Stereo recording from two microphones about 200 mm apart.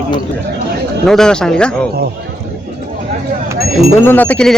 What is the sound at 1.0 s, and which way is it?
Speech, 5° left (ahead or behind).